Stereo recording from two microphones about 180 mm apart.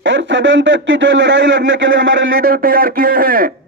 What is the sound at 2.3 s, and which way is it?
A man's voice, 55° right (ahead or behind).